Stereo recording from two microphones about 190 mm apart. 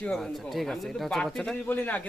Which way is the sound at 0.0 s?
5° left (ahead or behind).